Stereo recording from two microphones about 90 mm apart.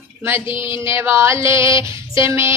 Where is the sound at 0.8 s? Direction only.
30° right (ahead or behind).